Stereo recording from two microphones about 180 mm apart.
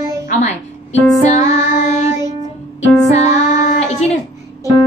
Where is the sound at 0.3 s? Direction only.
40° left (ahead or behind).